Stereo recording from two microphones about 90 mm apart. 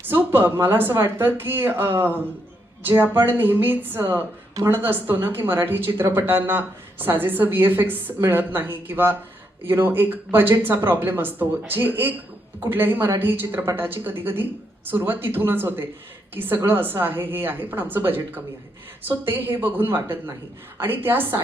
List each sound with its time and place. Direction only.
0.1 s speech: 25° right (ahead or behind)